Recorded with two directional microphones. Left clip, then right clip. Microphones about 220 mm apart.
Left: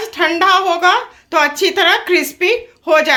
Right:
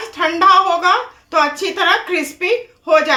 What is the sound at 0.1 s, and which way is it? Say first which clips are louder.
Speech: right 1 dB; 30° left (ahead or behind).